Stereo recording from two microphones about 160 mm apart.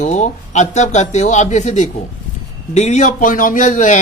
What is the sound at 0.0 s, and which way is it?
Speech, 50° left (ahead or behind).